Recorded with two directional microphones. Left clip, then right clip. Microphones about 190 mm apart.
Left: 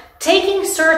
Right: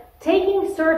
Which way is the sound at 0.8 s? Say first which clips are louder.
Left 6 dB; 5° left (ahead or behind).